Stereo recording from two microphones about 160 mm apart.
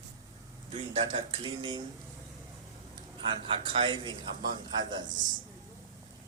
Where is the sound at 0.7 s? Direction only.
35° right (ahead or behind).